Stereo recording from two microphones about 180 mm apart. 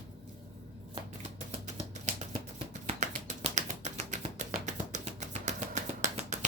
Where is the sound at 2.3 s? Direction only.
40° right (ahead or behind).